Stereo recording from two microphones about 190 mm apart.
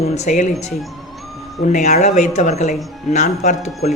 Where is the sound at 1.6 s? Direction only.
40° left (ahead or behind).